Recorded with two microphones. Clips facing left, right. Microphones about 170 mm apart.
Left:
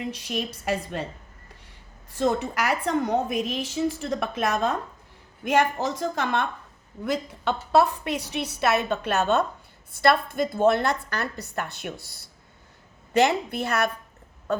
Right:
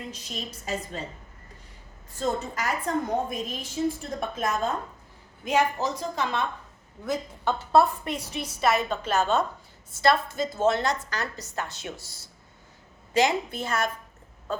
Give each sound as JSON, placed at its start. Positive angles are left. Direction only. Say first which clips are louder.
{"t": 0.1, "sound": "a woman's voice", "louder": "left 7 dB", "side_deg": 70}
{"t": 2.1, "sound": "a woman's voice", "louder": "left 4 dB", "side_deg": 75}
{"t": 5.5, "sound": "a woman's voice", "louder": "left 2 dB", "side_deg": 55}
{"t": 7.0, "sound": "a woman's voice", "louder": "left 2 dB", "side_deg": 70}